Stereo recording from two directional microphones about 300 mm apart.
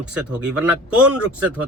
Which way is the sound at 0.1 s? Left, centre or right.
Centre.